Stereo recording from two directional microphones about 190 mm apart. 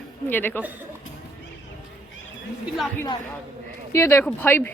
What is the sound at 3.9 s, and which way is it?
Speech, 15° left (ahead or behind).